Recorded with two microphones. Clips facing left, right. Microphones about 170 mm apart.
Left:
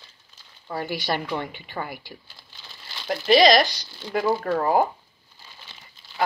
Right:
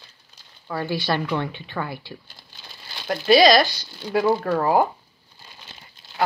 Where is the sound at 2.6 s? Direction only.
15° right (ahead or behind).